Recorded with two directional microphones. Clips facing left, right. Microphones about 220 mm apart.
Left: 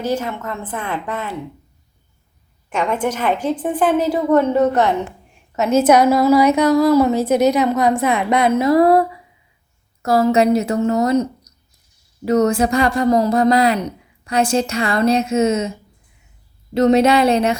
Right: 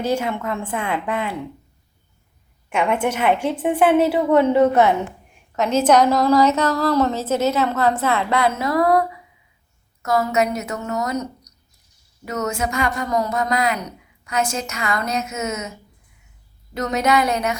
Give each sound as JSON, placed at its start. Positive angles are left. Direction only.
{"t": 0.1, "sound": "a woman's voice", "side_deg": -10}
{"t": 2.6, "sound": "a woman's voice", "side_deg": -10}
{"t": 5.5, "sound": "a woman's voice", "side_deg": 5}
{"t": 16.7, "sound": "speech", "side_deg": 30}